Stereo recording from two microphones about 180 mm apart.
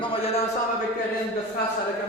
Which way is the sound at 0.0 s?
30° left (ahead or behind).